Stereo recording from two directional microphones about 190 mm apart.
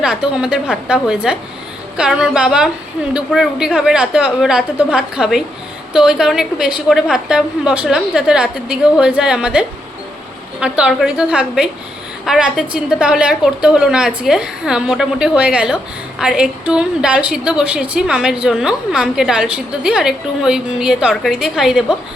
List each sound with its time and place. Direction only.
0.0 s a woman's voice: 5° right (ahead or behind)